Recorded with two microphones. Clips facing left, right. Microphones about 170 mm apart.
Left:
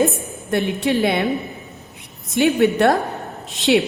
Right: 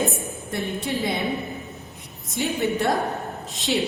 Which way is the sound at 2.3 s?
70° left (ahead or behind).